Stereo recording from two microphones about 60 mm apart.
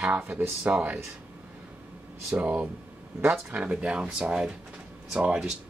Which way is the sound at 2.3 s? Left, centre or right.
Centre.